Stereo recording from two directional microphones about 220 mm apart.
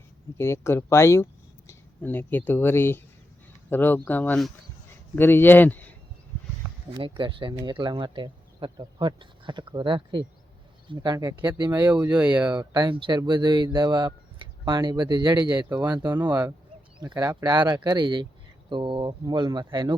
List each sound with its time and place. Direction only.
0.3 s speech: 10° left (ahead or behind)
7.2 s speech: 20° right (ahead or behind); by 12.5 s 5° right (ahead or behind)
12.5 s speech: 20° right (ahead or behind)
15.4 s speech: 5° right (ahead or behind)
15.8 s speech: 20° right (ahead or behind)